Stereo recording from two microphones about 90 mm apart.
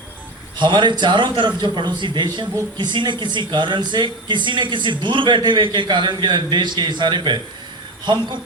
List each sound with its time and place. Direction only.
0.5 s speech: 60° right (ahead or behind)